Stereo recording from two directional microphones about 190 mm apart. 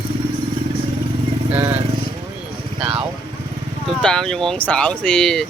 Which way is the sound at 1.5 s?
10° right (ahead or behind).